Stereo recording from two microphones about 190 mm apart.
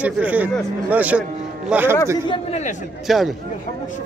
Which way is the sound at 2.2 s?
35° left (ahead or behind).